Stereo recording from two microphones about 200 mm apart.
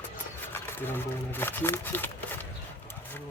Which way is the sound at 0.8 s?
10° left (ahead or behind).